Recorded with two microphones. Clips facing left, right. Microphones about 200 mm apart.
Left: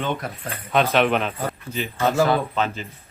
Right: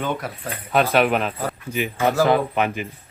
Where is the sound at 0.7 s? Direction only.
10° right (ahead or behind).